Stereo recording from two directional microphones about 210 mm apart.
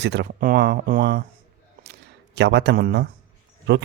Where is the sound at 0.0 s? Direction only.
55° right (ahead or behind).